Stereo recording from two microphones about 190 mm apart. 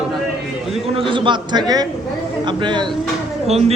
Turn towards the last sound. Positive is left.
turn(degrees=-35)  # may be behind; listen again after turning